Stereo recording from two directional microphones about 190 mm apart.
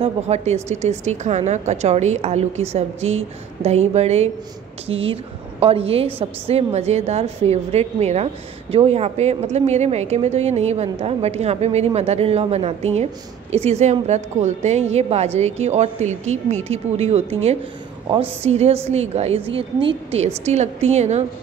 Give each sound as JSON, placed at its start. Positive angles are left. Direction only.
{"t": 0.0, "sound": "a woman's voice", "side_deg": -35}